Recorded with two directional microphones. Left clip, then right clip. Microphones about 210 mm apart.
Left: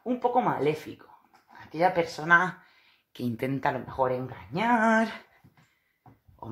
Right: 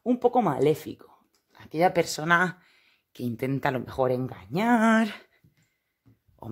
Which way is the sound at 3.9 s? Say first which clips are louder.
Right 1 dB; 55° right (ahead or behind).